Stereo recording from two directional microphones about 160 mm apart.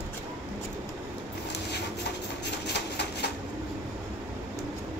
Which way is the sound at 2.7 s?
90° left.